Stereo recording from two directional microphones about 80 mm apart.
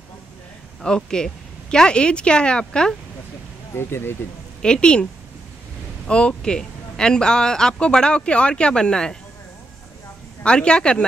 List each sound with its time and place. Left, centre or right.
0.8 s speech: centre
3.7 s speech: left
4.6 s a woman's voice: centre
6.0 s speech: centre
10.4 s speech: centre